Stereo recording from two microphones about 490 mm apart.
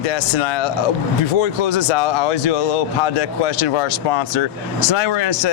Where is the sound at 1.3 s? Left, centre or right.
Left.